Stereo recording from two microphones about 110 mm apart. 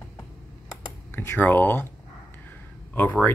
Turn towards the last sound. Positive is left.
turn(degrees=15)  # may be behind; listen again after turning